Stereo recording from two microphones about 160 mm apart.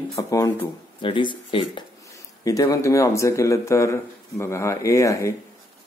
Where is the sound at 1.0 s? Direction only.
30° left (ahead or behind).